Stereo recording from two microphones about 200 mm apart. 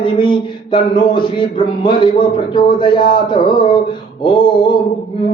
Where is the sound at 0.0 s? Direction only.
25° left (ahead or behind).